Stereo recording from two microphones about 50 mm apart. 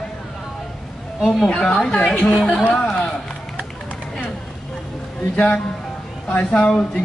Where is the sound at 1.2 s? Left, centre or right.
Centre.